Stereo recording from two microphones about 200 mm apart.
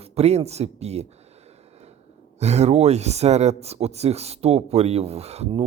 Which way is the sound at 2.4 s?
35° right (ahead or behind).